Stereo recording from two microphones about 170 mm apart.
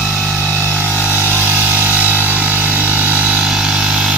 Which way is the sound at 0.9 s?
10° right (ahead or behind).